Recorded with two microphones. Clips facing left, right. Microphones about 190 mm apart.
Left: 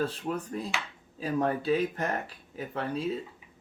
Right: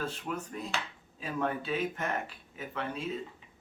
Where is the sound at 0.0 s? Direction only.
35° left (ahead or behind).